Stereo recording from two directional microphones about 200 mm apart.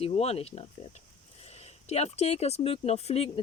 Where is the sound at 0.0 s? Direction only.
30° left (ahead or behind).